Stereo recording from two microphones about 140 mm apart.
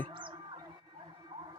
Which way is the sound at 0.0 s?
35° right (ahead or behind).